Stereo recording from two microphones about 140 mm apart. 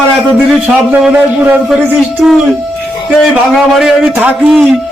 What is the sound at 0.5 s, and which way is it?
A man's voice, 5° right (ahead or behind).